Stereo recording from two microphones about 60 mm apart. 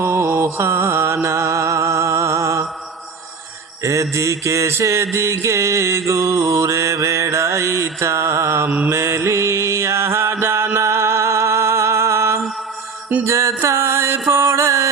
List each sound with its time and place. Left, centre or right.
0.0 s mantra: right
3.8 s mantra: right
10.4 s music: right
13.2 s mantra: right